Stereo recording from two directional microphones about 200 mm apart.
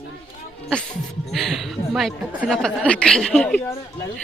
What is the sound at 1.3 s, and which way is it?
A woman's voice, centre (ahead or behind).